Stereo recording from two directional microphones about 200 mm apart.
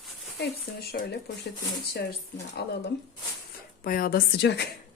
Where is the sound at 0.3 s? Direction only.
55° left (ahead or behind).